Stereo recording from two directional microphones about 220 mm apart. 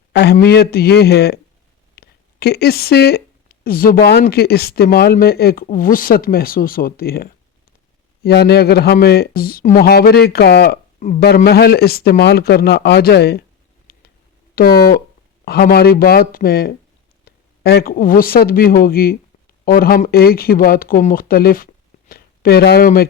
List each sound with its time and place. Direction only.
0.1 s a man's voice: 50° left (ahead or behind)
13.9 s a sound: 45° left (ahead or behind)
14.5 s speech: 40° left (ahead or behind)